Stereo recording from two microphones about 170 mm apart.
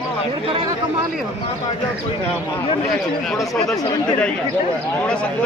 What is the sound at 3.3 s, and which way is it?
Speech, centre (ahead or behind).